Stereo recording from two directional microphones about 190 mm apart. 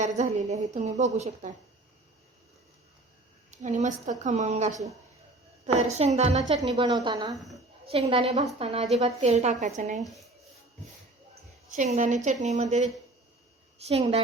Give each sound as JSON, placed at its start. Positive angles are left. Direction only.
{"t": 0.0, "sound": "a woman's voice", "side_deg": -35}
{"t": 3.6, "sound": "a woman's voice", "side_deg": -40}
{"t": 7.3, "sound": "a woman's voice", "side_deg": 0}
{"t": 7.9, "sound": "a woman's voice", "side_deg": -30}
{"t": 10.0, "sound": "speech", "side_deg": 0}
{"t": 11.7, "sound": "a woman's voice", "side_deg": -40}
{"t": 13.7, "sound": "a woman's voice", "side_deg": -35}